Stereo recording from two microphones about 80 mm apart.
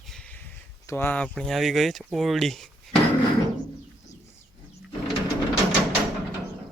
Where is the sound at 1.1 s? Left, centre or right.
Centre.